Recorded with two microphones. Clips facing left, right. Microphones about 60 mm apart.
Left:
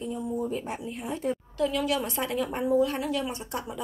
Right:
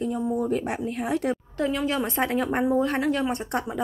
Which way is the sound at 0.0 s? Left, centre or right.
Right.